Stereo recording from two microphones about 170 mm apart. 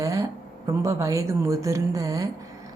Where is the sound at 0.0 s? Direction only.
20° right (ahead or behind).